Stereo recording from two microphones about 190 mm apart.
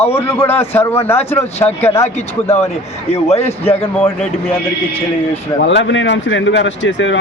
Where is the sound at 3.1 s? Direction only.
35° left (ahead or behind).